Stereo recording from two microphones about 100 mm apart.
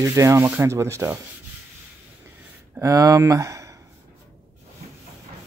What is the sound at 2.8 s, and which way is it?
Speech, 35° right (ahead or behind).